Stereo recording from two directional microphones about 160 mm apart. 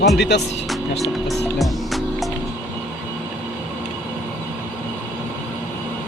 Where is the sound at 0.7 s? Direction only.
Centre (ahead or behind).